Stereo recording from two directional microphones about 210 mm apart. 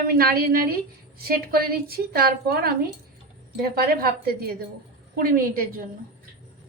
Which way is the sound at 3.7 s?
45° right (ahead or behind).